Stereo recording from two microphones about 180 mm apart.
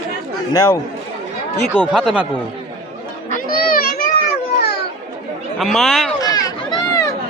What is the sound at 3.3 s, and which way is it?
Children playing, 55° left (ahead or behind).